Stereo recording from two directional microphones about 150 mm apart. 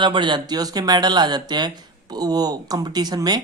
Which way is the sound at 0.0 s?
30° right (ahead or behind).